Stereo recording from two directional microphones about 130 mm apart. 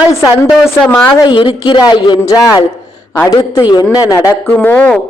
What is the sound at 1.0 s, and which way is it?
Speech, 35° left (ahead or behind).